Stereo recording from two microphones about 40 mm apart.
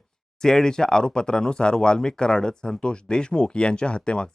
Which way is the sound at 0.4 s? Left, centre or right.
Centre.